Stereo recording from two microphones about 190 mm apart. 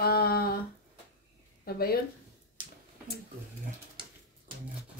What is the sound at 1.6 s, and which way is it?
Speech, 55° left (ahead or behind).